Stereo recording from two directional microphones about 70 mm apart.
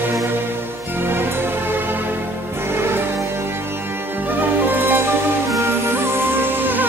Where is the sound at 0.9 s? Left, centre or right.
Right.